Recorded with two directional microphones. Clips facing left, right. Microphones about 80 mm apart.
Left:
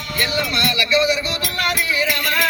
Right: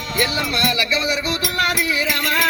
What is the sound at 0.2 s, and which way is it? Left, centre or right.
Music, centre.